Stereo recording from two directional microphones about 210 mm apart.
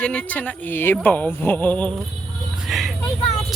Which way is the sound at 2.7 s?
Centre (ahead or behind).